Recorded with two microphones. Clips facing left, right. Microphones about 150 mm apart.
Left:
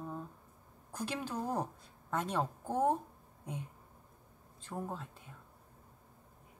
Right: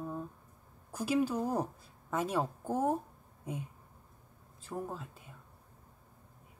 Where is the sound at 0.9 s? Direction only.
10° right (ahead or behind).